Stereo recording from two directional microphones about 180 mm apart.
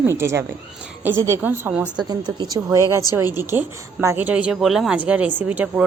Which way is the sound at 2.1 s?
25° right (ahead or behind).